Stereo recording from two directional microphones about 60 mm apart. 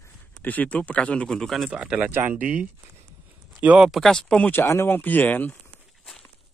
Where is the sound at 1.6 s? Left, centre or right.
Centre.